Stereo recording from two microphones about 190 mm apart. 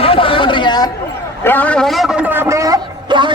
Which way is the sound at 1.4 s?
10° left (ahead or behind).